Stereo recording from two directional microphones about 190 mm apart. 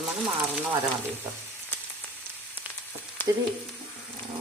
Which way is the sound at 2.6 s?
10° right (ahead or behind).